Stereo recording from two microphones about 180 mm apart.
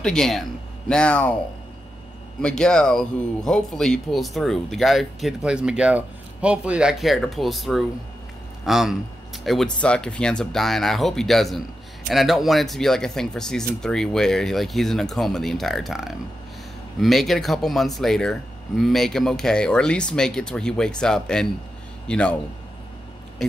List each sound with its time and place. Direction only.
0.0 s speech: 5° left (ahead or behind)
2.4 s a man's voice: 5° left (ahead or behind)